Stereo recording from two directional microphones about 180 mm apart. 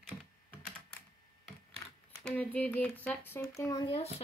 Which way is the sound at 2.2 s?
10° left (ahead or behind).